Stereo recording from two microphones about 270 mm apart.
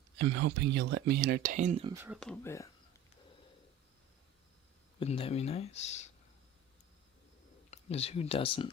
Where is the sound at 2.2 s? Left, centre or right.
Centre.